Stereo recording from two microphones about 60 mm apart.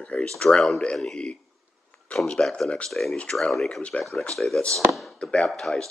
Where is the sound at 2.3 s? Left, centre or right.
Centre.